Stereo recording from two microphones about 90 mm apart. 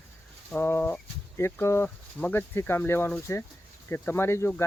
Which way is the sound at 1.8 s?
20° left (ahead or behind).